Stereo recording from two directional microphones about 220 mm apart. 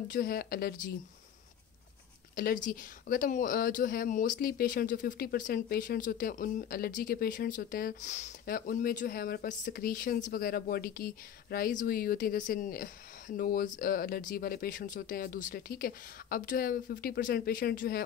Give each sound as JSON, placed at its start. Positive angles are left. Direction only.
{"t": 0.1, "sound": "speech", "side_deg": 45}
{"t": 2.3, "sound": "speech", "side_deg": 40}